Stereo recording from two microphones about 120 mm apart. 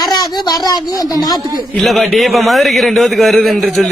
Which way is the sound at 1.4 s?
30° right (ahead or behind).